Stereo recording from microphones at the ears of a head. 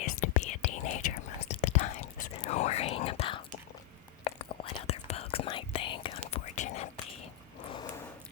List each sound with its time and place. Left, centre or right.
0.0 s whispering: left